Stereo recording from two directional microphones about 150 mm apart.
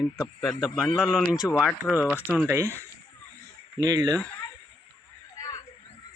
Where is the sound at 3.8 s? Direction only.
25° right (ahead or behind).